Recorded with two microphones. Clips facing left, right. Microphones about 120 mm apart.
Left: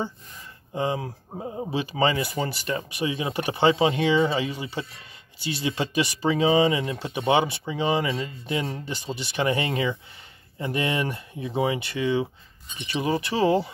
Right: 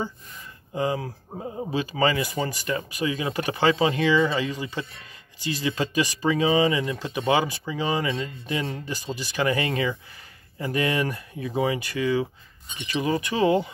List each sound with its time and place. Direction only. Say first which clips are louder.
0.7 s speech: right 1 dB; 25° left (ahead or behind)
5.6 s speech: even; 15° left (ahead or behind); by 13.7 s 35° left (ahead or behind)